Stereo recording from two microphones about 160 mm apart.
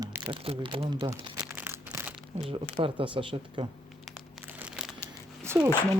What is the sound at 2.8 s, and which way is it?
Speech, 30° right (ahead or behind).